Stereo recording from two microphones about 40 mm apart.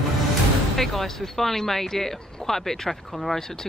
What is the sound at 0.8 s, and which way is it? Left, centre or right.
Speech, centre.